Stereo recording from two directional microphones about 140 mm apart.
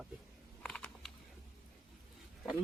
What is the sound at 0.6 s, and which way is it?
Typing, 5° left (ahead or behind).